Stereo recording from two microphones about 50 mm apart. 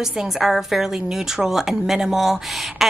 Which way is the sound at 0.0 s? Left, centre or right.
Centre.